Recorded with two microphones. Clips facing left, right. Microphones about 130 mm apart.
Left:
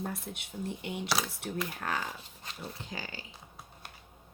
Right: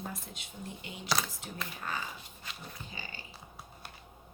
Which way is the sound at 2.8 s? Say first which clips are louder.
Left 4 dB; 90° left.